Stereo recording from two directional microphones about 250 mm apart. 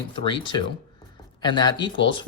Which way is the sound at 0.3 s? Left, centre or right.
Centre.